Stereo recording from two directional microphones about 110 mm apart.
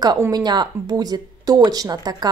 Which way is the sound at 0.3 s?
40° right (ahead or behind).